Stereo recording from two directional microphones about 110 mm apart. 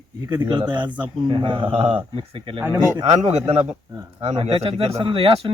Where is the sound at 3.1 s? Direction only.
75° right (ahead or behind).